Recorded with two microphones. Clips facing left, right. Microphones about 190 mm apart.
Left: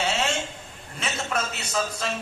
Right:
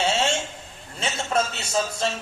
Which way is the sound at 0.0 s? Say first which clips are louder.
Right 3 dB; 30° right (ahead or behind).